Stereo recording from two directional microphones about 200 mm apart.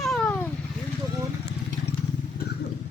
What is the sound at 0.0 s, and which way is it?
Vehicle, 5° left (ahead or behind).